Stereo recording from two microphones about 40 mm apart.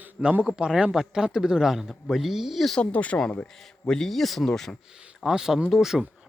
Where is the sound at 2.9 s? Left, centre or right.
Left.